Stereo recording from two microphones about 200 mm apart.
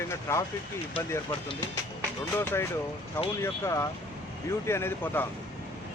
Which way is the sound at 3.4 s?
15° left (ahead or behind).